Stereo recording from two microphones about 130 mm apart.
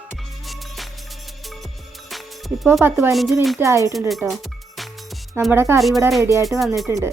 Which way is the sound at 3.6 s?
25° right (ahead or behind).